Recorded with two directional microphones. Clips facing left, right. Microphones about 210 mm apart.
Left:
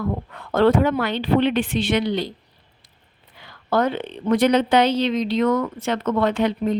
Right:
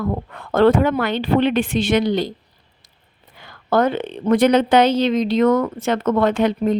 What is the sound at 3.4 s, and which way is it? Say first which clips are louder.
Speech: right 3 dB; 50° right (ahead or behind).